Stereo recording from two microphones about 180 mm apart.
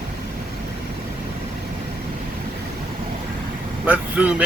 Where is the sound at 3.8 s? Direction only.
5° right (ahead or behind).